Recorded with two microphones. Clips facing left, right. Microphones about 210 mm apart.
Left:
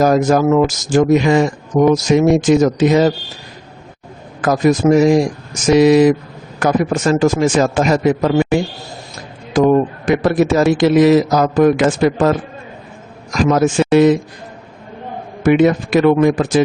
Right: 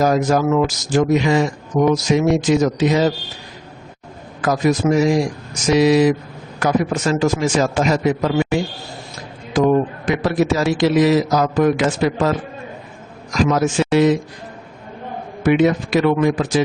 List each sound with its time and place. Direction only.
0.0 s speech: 50° left (ahead or behind)
4.4 s speech: 50° left (ahead or behind)
13.3 s speech: 50° left (ahead or behind)
15.4 s speech: 50° left (ahead or behind)